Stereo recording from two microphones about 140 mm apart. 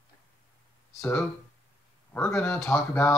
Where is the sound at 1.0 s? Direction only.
15° left (ahead or behind).